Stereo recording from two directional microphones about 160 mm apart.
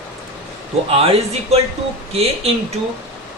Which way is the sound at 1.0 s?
40° right (ahead or behind).